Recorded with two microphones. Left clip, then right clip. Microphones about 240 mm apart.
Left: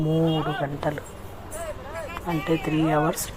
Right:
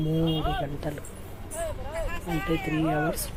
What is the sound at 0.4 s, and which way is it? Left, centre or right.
Speech, centre.